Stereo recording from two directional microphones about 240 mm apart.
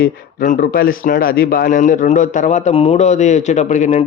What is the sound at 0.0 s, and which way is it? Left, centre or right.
Speech, left.